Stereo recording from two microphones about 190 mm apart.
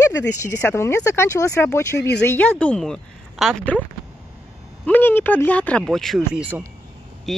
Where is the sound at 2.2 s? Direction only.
10° left (ahead or behind).